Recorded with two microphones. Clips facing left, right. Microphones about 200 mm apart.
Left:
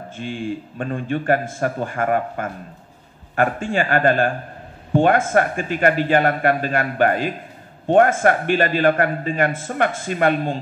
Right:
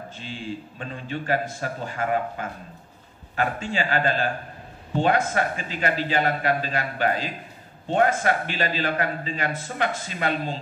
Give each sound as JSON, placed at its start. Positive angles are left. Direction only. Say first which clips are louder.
{"t": 0.1, "sound": "a man's voice", "louder": "left 9 dB", "side_deg": 55}